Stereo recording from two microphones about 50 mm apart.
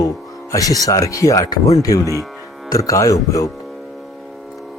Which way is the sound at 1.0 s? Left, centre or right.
Left.